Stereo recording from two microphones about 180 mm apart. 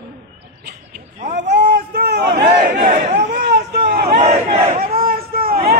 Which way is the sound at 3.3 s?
65° right (ahead or behind).